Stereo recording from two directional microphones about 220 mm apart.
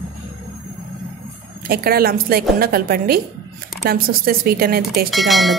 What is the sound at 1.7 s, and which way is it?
A woman's voice, 45° right (ahead or behind).